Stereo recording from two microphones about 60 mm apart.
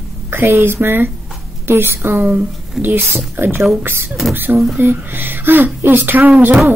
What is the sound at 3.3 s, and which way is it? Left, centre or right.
Speech, right.